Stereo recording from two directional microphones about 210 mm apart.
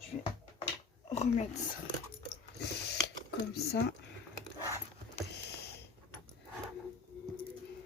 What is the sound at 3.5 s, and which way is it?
Speech, 50° left (ahead or behind).